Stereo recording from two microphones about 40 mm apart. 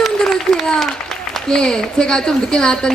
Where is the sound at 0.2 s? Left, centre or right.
Centre.